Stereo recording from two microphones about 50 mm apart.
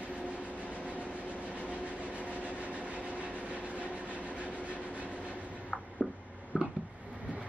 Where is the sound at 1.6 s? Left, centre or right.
Right.